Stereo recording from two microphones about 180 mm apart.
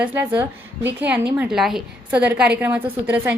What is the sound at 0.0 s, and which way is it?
A woman's voice, 10° right (ahead or behind).